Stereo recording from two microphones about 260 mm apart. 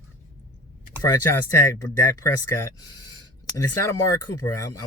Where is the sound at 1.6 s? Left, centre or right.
Centre.